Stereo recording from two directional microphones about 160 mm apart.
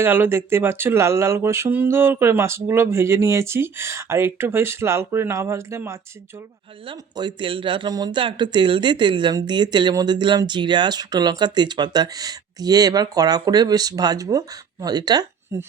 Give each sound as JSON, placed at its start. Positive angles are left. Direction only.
{"t": 0.0, "sound": "speech", "side_deg": -15}
{"t": 6.8, "sound": "speech", "side_deg": -30}